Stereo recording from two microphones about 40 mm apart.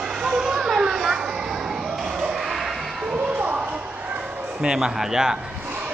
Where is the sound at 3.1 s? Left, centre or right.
Right.